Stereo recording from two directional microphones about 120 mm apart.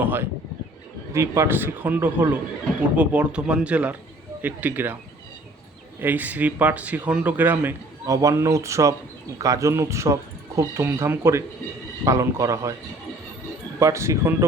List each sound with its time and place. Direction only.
0.0 s a man's voice: 15° right (ahead or behind)
6.0 s a man's voice: 15° right (ahead or behind)
8.0 s speech: 30° right (ahead or behind)
13.7 s speech: 25° right (ahead or behind)